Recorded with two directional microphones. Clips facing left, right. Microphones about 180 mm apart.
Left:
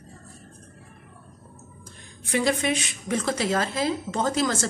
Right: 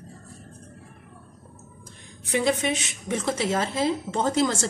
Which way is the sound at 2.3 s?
20° right (ahead or behind).